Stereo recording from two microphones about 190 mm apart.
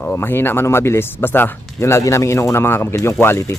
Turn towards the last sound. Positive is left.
turn(degrees=15)  # may be behind; listen again after turning